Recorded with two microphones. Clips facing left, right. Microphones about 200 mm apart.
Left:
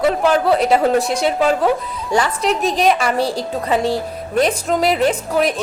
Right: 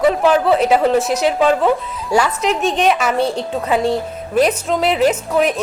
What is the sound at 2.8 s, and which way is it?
Speech, centre (ahead or behind).